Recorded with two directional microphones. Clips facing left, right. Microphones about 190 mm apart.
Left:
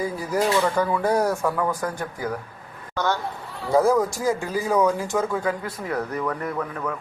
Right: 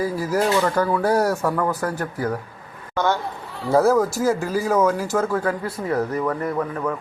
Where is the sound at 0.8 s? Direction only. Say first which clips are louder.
Right 2 dB; 5° right (ahead or behind).